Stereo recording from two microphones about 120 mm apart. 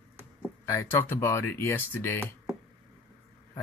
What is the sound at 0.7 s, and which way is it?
Speech, 20° left (ahead or behind).